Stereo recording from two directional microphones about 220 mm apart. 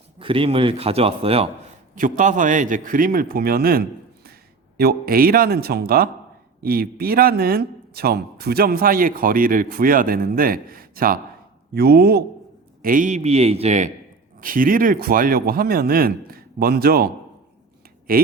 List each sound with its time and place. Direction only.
0.2 s a man's voice: 25° right (ahead or behind); by 17.1 s 45° right (ahead or behind)
18.1 s speech: 40° right (ahead or behind)